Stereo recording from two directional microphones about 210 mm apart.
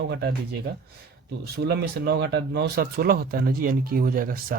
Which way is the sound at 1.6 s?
50° right (ahead or behind).